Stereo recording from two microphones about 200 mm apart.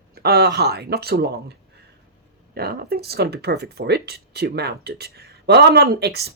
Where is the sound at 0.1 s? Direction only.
50° right (ahead or behind).